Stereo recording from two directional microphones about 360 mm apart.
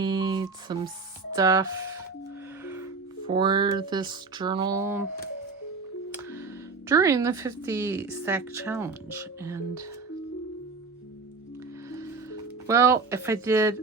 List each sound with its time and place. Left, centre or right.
0.0 s music: centre
1.3 s a woman's voice: centre
3.2 s a woman's voice: centre
6.8 s a woman's voice: centre
11.9 s music: centre